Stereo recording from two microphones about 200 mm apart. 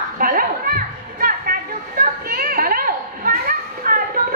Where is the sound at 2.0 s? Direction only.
45° right (ahead or behind).